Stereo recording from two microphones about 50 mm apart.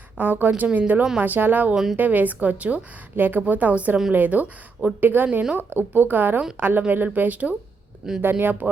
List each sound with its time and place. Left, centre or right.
0.2 s a woman's voice: right
1.7 s a woman's voice: centre
2.0 s a woman's voice: right
8.2 s a woman's voice: right